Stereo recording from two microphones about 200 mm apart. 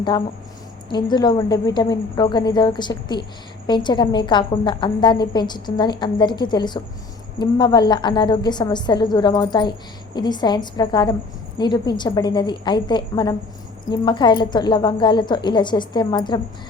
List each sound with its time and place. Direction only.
0.9 s a woman's voice: 20° left (ahead or behind)